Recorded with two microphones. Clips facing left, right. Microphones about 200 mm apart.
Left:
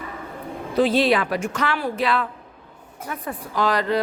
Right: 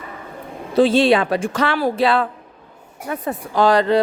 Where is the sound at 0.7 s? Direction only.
25° right (ahead or behind).